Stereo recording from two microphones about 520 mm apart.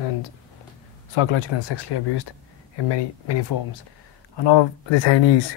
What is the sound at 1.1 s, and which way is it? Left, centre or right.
Speech, left.